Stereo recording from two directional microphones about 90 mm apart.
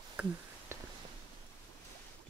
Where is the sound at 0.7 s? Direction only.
30° right (ahead or behind).